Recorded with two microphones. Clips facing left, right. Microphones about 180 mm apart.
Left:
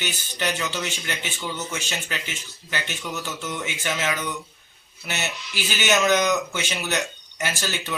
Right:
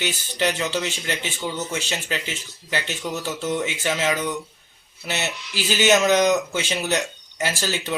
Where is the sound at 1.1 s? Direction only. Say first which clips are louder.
Right 3 dB; 30° right (ahead or behind).